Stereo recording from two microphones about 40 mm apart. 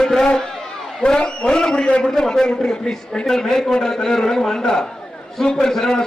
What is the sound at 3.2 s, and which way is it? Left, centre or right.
A man's voice, centre.